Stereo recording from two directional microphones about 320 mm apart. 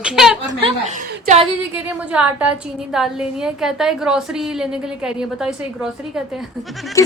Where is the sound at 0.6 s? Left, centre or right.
Centre.